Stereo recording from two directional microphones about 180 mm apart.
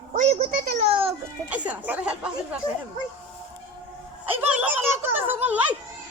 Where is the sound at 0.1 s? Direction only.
45° right (ahead or behind).